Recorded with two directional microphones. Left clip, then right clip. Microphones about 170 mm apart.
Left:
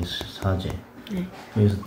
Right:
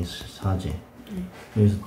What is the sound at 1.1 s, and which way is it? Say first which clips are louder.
Speech: left 5 dB; 45° left (ahead or behind).